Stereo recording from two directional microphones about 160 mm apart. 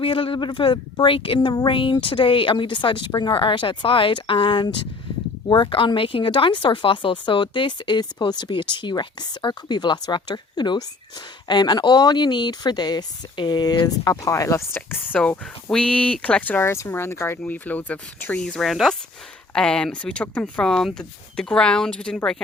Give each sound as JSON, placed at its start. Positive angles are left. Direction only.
{"t": 0.0, "sound": "speech", "side_deg": 35}